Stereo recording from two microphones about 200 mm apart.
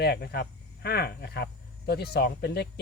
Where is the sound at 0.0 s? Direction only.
55° left (ahead or behind).